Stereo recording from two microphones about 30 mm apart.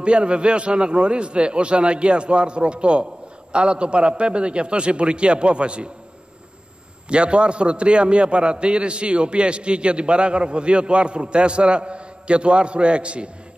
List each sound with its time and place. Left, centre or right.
0.0 s a man's voice: right
7.1 s a man's voice: right